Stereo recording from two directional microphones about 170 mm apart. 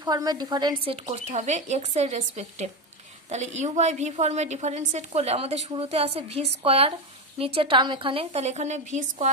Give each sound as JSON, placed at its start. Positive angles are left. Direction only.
{"t": 0.0, "sound": "a woman's voice", "side_deg": -25}
{"t": 0.9, "sound": "a woman's voice", "side_deg": -40}